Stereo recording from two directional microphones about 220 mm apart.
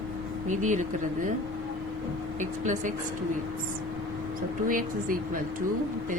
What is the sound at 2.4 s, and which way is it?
Speech, 35° right (ahead or behind).